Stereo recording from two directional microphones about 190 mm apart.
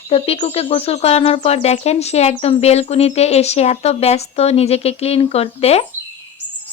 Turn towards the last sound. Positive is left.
turn(degrees=35)  # may be behind; listen again after turning